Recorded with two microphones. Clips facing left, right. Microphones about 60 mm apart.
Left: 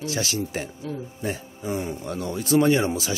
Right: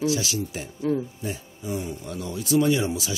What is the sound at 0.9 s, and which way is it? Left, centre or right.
Speech, right.